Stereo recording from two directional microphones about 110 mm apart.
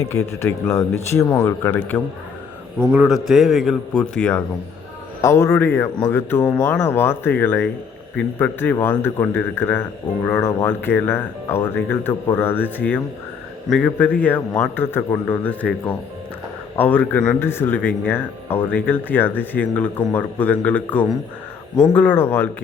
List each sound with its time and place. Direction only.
0.0 s speech: 25° left (ahead or behind)
2.7 s a man's voice: 20° right (ahead or behind)
3.0 s a man's voice: 5° right (ahead or behind)
3.9 s speech: 10° left (ahead or behind)
5.2 s speech: 25° left (ahead or behind)